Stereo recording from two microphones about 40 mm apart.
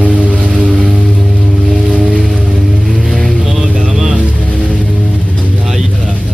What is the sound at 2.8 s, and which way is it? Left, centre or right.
Vehicle, centre.